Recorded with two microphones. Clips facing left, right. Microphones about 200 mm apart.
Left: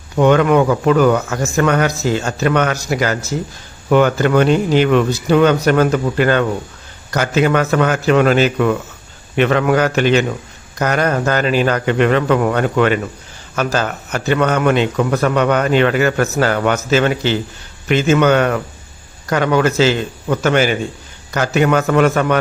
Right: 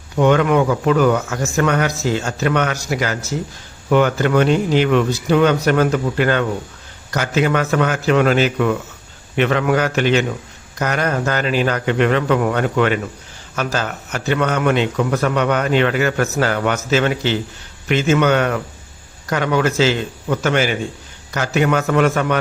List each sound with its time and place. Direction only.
0.2 s a man's voice: 50° left (ahead or behind)
1.5 s a man's voice: 45° left (ahead or behind)